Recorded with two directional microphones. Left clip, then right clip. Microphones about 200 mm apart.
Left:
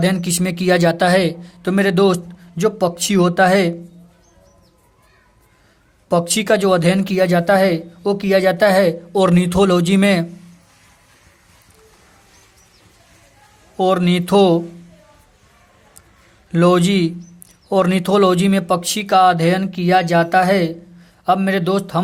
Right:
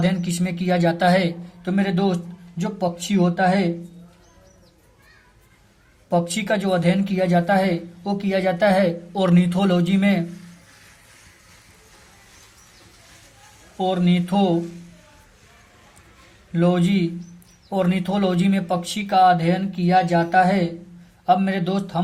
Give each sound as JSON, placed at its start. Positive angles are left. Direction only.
{"t": 0.0, "sound": "speech", "side_deg": 45}
{"t": 6.1, "sound": "speech", "side_deg": 45}
{"t": 13.7, "sound": "speech", "side_deg": 50}
{"t": 16.5, "sound": "speech", "side_deg": 45}